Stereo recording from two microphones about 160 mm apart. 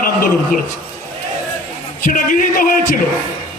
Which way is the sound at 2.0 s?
60° left (ahead or behind).